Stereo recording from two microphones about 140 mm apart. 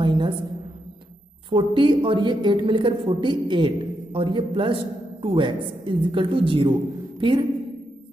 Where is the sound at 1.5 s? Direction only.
35° right (ahead or behind).